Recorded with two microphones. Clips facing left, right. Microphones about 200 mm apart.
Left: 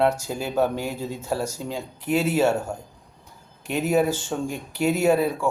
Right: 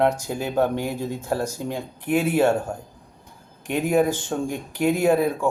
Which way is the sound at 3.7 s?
10° right (ahead or behind).